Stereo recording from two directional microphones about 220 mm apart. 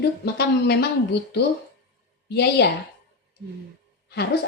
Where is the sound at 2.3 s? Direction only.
45° left (ahead or behind).